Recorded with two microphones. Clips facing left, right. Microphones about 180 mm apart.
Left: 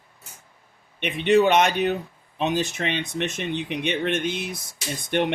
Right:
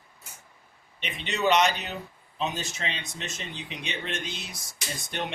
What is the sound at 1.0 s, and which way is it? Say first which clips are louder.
Speech: left 10 dB; 55° left (ahead or behind).